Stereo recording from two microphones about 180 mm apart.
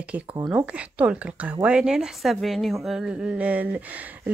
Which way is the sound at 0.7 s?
5° right (ahead or behind).